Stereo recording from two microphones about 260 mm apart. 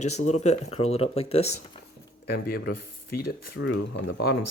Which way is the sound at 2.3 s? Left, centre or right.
Left.